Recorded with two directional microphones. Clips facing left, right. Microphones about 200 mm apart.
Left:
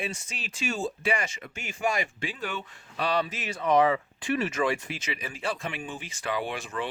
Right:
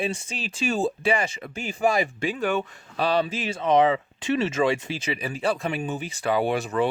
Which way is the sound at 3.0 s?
30° right (ahead or behind).